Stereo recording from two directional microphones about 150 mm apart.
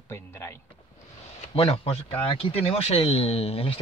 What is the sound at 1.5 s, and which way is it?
A man's voice, 40° left (ahead or behind).